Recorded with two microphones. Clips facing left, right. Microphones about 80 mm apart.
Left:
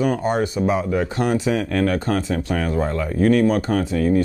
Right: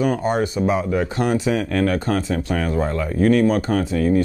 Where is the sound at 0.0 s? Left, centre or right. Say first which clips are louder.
Even; right.